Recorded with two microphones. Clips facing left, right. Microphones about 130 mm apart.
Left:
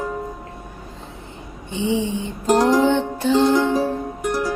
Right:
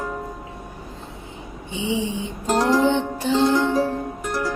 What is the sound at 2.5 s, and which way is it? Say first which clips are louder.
Female singing: left 3 dB; 15° left (ahead or behind).